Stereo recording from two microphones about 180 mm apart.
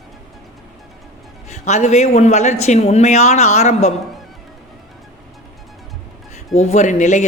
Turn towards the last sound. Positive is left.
turn(degrees=40)  # may be behind; listen again after turning